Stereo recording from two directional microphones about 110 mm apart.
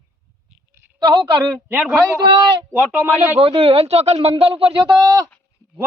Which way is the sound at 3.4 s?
55° right (ahead or behind).